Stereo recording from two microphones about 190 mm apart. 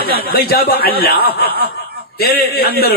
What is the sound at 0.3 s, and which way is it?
A man's voice, 55° left (ahead or behind).